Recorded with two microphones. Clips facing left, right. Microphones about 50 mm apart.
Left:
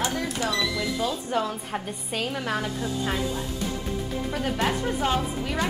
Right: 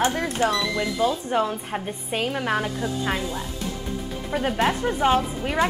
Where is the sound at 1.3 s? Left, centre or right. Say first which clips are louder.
Right 3 dB; centre.